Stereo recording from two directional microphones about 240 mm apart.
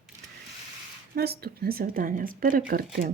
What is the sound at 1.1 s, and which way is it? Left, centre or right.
A woman's voice, right.